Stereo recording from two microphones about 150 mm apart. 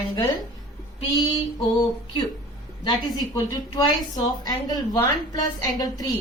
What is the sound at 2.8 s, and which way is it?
A woman's voice, 25° left (ahead or behind).